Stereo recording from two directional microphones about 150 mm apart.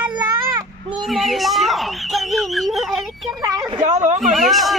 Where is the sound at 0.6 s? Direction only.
30° right (ahead or behind).